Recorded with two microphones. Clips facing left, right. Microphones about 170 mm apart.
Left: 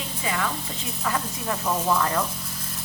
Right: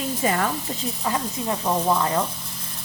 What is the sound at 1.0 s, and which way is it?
Speech, 20° right (ahead or behind).